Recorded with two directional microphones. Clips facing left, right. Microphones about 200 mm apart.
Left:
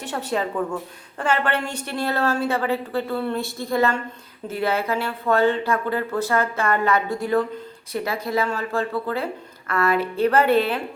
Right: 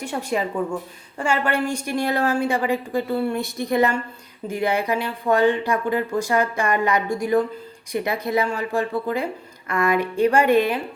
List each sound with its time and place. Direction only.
0.0 s speech: 10° right (ahead or behind)